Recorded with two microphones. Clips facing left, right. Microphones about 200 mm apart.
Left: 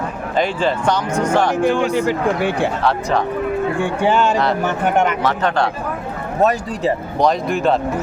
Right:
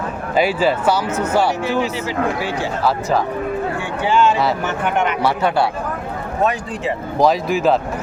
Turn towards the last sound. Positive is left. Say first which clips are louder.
# right 1 dB
turn(degrees=0)  # may be behind; listen again after turning